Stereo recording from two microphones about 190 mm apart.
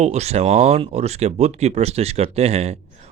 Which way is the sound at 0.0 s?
35° right (ahead or behind).